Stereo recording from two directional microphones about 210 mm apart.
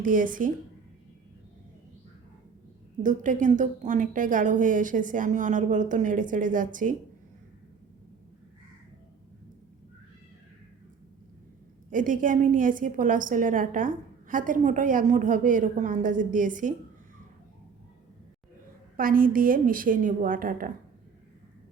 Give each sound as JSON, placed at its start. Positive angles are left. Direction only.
{"t": 0.0, "sound": "a woman's voice", "side_deg": -40}
{"t": 3.0, "sound": "a woman's voice", "side_deg": -35}
{"t": 11.9, "sound": "a woman's voice", "side_deg": -40}
{"t": 18.9, "sound": "a woman's voice", "side_deg": -40}